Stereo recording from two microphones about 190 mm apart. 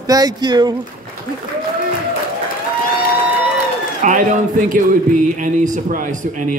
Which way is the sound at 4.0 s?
45° right (ahead or behind).